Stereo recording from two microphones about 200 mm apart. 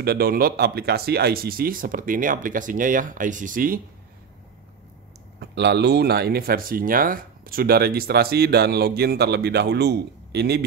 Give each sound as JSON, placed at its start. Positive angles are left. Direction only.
{"t": 0.0, "sound": "speech", "side_deg": -50}
{"t": 5.4, "sound": "speech", "side_deg": -55}